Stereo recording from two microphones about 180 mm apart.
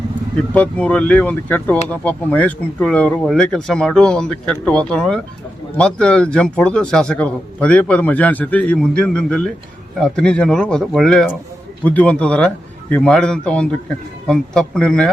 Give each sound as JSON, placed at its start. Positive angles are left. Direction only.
{"t": 0.5, "sound": "a man's voice", "side_deg": 5}